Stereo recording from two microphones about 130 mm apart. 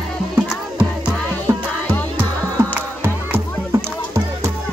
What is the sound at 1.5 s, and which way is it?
Music, 20° right (ahead or behind).